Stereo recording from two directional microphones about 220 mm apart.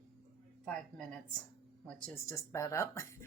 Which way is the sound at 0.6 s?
5° left (ahead or behind).